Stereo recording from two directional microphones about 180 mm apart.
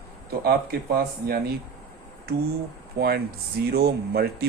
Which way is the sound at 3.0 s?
65° right (ahead or behind).